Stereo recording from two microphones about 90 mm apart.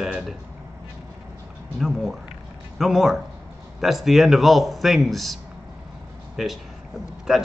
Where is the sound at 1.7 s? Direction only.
Centre (ahead or behind).